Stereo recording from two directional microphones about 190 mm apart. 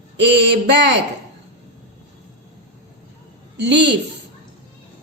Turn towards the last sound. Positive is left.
turn(degrees=-65)  # may be behind; listen again after turning